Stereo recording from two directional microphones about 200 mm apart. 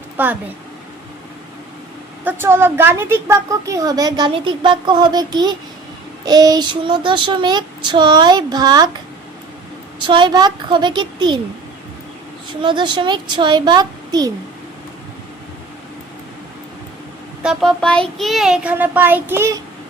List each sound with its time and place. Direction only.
0.2 s a woman's voice: 10° right (ahead or behind)
2.2 s a woman's voice: 10° right (ahead or behind)
10.0 s speech: 25° right (ahead or behind)
12.6 s speech: 25° right (ahead or behind)
17.4 s a child's voice: centre (ahead or behind)